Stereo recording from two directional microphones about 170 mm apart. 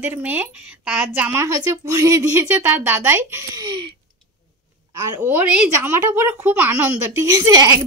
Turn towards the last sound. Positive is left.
turn(degrees=-20)  # may be behind; listen again after turning